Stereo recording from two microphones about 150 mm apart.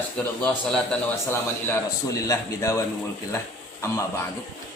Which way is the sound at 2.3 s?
20° left (ahead or behind).